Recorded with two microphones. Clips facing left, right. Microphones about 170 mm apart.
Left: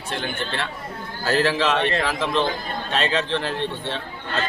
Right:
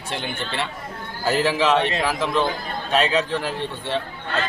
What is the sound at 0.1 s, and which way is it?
A man's voice, 20° right (ahead or behind).